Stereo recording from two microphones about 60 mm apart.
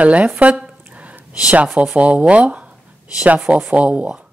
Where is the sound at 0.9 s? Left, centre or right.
Right.